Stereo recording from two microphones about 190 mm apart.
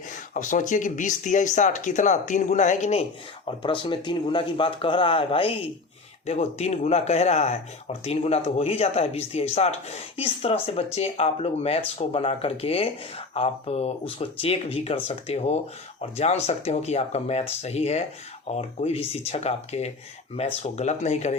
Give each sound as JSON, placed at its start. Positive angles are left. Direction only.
{"t": 0.3, "sound": "speech", "side_deg": 40}
{"t": 3.6, "sound": "speech", "side_deg": 25}